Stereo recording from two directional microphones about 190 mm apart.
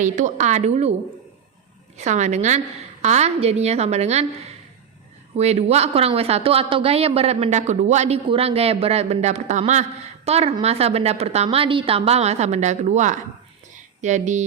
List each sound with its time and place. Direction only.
0.0 s speech: 40° right (ahead or behind)
2.0 s speech: 40° right (ahead or behind)
5.4 s speech: 35° right (ahead or behind)
13.7 s a sound: 40° right (ahead or behind)